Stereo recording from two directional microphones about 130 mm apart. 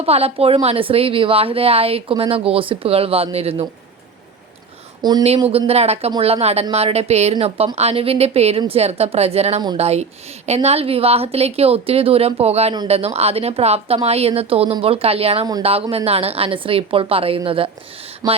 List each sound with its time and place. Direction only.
0.0 s a woman's voice: 50° right (ahead or behind)
5.0 s speech: 35° right (ahead or behind)
5.5 s a woman's voice: 50° right (ahead or behind)
18.2 s a sound: 30° right (ahead or behind)